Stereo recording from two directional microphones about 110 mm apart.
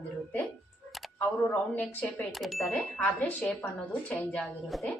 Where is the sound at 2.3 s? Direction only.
Centre (ahead or behind).